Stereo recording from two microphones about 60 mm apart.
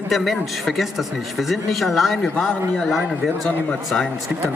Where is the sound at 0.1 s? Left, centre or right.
Centre.